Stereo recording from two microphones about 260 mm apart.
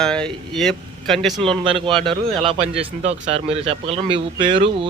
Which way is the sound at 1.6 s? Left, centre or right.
Centre.